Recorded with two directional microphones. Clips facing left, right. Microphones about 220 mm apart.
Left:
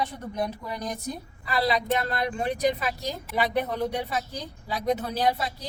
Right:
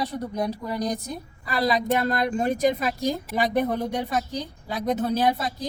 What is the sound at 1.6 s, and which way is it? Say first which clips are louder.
Speech: right 3 dB; 45° right (ahead or behind).